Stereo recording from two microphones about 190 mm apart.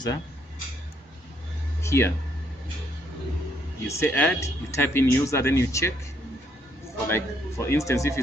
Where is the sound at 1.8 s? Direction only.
15° left (ahead or behind).